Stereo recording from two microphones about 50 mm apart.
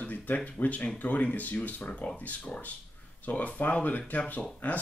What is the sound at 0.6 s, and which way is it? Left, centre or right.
Speech, left.